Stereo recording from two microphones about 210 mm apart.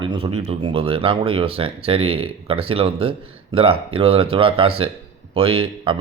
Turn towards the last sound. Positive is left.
turn(degrees=-25)  # may be behind; listen again after turning